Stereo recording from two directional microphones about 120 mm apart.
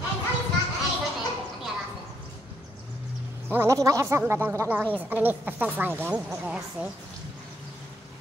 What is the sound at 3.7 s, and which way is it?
Speech, 30° right (ahead or behind).